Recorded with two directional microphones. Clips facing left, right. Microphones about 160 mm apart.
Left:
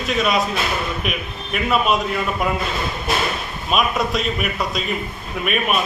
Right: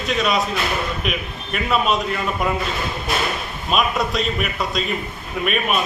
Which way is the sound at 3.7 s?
Centre (ahead or behind).